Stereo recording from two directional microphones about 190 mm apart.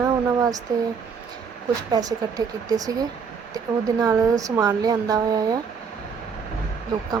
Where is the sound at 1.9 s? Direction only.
20° right (ahead or behind).